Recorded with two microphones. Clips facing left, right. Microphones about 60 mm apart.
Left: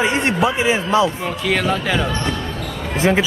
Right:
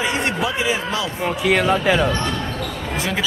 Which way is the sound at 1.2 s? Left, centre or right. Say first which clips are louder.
Right 2 dB; centre.